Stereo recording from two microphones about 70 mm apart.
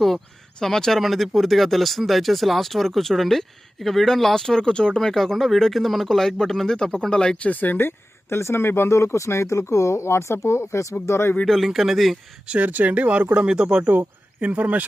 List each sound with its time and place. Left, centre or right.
0.6 s speech: centre; by 11.3 s left
11.4 s speech: centre
12.5 s speech: right
13.8 s speech: right